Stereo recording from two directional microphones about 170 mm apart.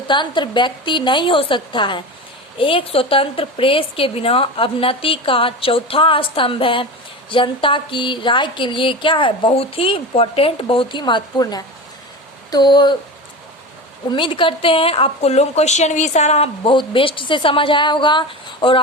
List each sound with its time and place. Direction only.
0.1 s a woman's voice: 25° left (ahead or behind)
14.1 s a woman's voice: 30° left (ahead or behind)